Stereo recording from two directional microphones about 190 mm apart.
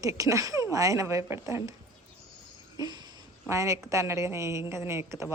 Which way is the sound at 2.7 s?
20° right (ahead or behind).